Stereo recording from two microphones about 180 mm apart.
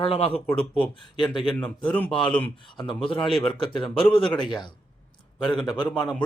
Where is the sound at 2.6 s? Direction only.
25° left (ahead or behind).